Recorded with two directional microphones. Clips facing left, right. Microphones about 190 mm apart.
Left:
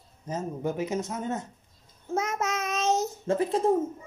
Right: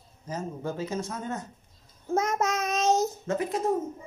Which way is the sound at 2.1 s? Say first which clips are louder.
Right 3 dB; 40° right (ahead or behind).